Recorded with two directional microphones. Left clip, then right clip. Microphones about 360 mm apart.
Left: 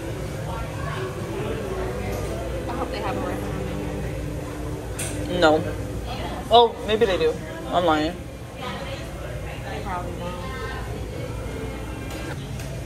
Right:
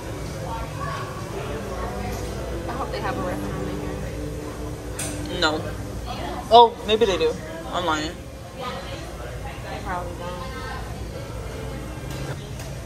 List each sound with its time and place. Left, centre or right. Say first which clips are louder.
5.3 s a sound: left 5 dB; centre
6.5 s a man's voice: right 3 dB; centre
7.8 s speech: left 3 dB; centre